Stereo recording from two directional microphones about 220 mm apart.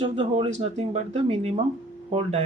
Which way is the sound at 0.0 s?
25° right (ahead or behind).